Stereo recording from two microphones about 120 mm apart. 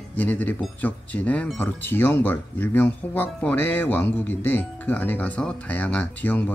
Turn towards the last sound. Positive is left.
turn(degrees=15)  # may be behind; listen again after turning